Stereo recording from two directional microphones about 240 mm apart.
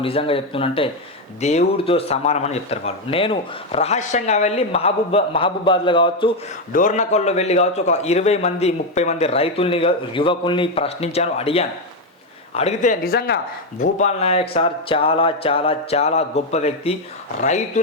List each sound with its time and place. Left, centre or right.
0.0 s speech: left
6.7 s speech: left